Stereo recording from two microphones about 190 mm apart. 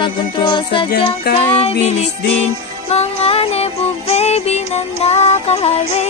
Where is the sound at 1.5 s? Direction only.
35° left (ahead or behind).